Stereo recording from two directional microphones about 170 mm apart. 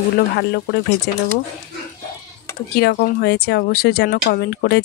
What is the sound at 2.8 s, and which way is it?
Speech, 70° left (ahead or behind).